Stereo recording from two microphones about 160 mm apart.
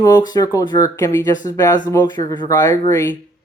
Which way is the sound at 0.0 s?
25° left (ahead or behind).